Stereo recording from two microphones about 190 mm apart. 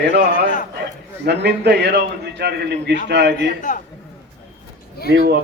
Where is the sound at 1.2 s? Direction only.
65° right (ahead or behind).